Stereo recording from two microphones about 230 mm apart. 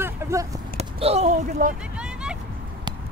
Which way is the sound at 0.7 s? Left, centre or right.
Right.